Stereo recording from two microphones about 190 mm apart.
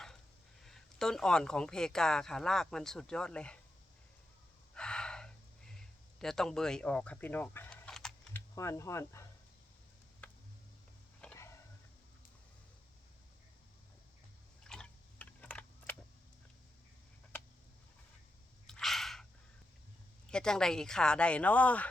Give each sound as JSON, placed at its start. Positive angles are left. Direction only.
{"t": 0.6, "sound": "speech", "side_deg": 5}
{"t": 4.7, "sound": "gasp", "side_deg": 5}
{"t": 8.5, "sound": "speech", "side_deg": 15}
{"t": 11.3, "sound": "a sound", "side_deg": 15}
{"t": 14.6, "sound": "typing", "side_deg": 5}
{"t": 18.7, "sound": "a sound", "side_deg": 0}
{"t": 20.3, "sound": "speech", "side_deg": 5}